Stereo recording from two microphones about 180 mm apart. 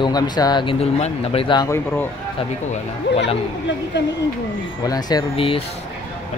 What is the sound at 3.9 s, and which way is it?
Speech, 75° left (ahead or behind).